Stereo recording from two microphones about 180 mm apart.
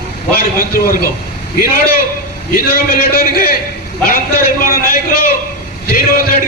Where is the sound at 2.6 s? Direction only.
55° left (ahead or behind).